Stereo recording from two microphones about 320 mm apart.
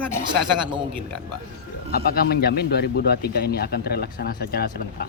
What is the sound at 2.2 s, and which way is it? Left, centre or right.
Speech, left.